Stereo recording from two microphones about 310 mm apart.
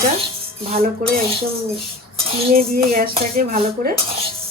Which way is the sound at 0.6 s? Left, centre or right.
Right.